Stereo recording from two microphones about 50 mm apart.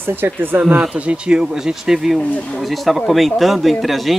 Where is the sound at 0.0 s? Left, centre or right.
Right.